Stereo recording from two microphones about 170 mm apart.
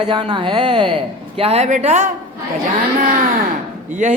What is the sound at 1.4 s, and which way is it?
Speech, 35° right (ahead or behind).